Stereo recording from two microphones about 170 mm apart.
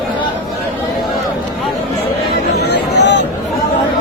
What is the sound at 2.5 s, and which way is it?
Vehicle, 90° left.